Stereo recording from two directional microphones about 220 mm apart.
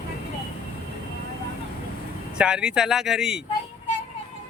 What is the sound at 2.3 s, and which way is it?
Speech, 5° right (ahead or behind).